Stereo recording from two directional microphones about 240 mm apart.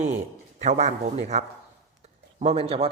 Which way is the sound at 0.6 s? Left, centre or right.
Right.